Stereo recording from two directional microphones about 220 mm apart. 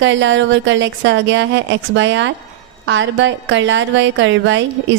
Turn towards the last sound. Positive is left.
turn(degrees=-55)  # may be behind; listen again after turning